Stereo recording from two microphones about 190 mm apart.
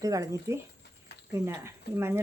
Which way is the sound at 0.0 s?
20° right (ahead or behind).